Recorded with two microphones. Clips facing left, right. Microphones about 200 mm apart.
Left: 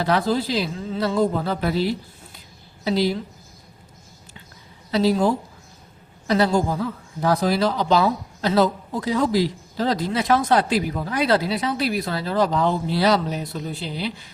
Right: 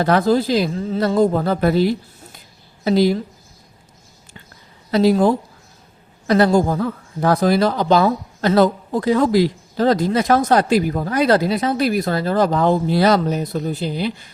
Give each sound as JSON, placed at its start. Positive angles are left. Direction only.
{"t": 0.0, "sound": "speech", "side_deg": -45}
{"t": 4.9, "sound": "speech", "side_deg": -50}